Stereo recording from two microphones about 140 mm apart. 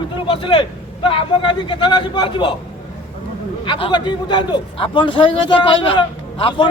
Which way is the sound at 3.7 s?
35° left (ahead or behind).